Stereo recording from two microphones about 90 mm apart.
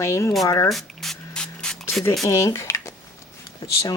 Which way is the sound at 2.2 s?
35° left (ahead or behind).